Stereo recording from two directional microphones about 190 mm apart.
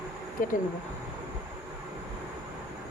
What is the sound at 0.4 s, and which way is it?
Speech, 50° left (ahead or behind).